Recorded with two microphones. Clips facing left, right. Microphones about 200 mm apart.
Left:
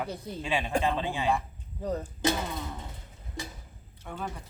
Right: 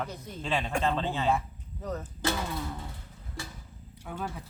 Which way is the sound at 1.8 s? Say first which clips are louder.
Left 4 dB; 30° left (ahead or behind).